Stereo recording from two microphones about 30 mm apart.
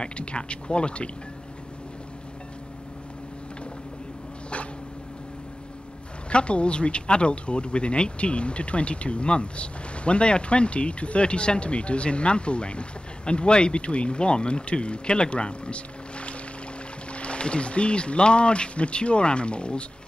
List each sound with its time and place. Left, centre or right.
0.0 s speech: left
6.3 s speech: left